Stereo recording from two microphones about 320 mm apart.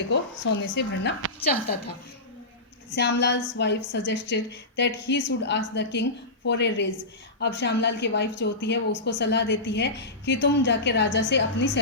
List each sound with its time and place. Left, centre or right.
0.1 s a woman's voice: left
2.9 s a woman's voice: left